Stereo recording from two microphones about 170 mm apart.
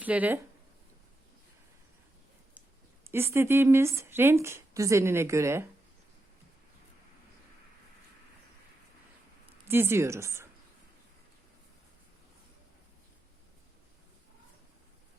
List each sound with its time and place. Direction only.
0.0 s speech: 10° right (ahead or behind)
3.1 s speech: 15° right (ahead or behind)
9.6 s speech: 15° right (ahead or behind)